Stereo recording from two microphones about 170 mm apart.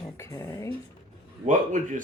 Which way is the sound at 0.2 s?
20° left (ahead or behind).